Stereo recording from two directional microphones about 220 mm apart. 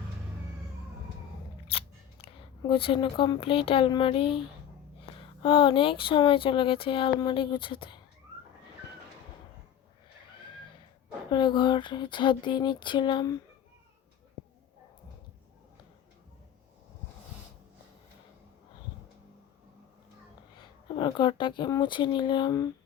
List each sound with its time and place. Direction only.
1.6 s speech: 25° left (ahead or behind)
11.3 s speech: 20° left (ahead or behind)
20.8 s speech: 20° left (ahead or behind)